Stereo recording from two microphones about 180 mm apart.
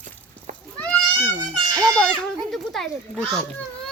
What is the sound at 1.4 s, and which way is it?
Children playing, 20° right (ahead or behind).